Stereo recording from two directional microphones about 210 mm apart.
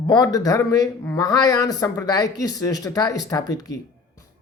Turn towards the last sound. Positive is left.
turn(degrees=15)  # may be behind; listen again after turning